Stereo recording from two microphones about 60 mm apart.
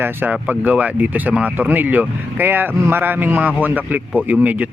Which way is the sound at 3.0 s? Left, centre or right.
Right.